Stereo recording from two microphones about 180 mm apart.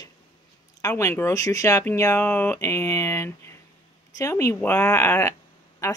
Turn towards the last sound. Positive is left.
turn(degrees=15)  # may be behind; listen again after turning